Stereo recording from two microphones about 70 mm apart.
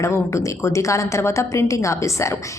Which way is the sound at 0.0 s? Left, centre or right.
Left.